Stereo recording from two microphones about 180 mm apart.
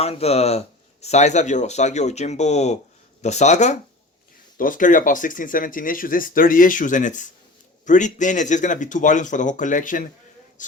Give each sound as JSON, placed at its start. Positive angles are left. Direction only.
{"t": 0.0, "sound": "speech", "side_deg": 35}